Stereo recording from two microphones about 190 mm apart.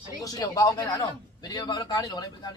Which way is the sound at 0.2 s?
15° left (ahead or behind).